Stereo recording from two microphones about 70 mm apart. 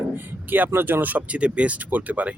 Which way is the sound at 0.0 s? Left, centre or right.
Right.